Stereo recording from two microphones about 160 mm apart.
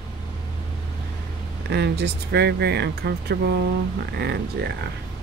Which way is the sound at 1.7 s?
90° right.